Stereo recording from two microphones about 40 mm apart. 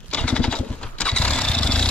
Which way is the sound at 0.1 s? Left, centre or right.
Left.